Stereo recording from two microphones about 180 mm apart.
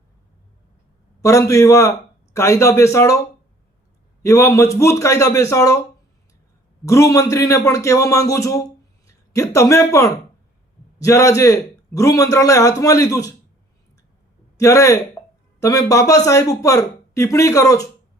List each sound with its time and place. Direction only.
1.2 s a man's voice: 15° left (ahead or behind)
4.2 s a man's voice: 15° left (ahead or behind)
6.8 s a man's voice: 15° left (ahead or behind)
14.6 s a man's voice: 15° left (ahead or behind)